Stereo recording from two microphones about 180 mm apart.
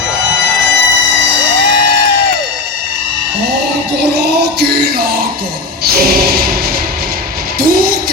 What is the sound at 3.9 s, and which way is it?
Music, 65° right (ahead or behind).